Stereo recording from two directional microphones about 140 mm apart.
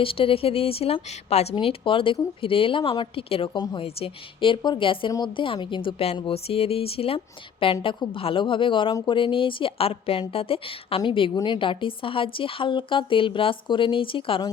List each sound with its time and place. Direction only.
0.0 s a woman's voice: 40° left (ahead or behind)
3.6 s a woman's voice: 30° left (ahead or behind)